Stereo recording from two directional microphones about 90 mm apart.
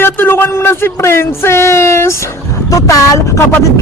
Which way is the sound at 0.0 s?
25° left (ahead or behind).